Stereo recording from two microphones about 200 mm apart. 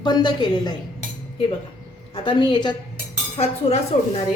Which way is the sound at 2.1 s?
25° left (ahead or behind).